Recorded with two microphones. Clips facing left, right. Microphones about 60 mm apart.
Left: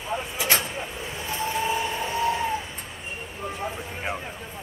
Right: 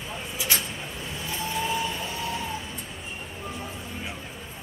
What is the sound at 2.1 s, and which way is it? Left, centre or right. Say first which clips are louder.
Vehicle: left 7 dB; left.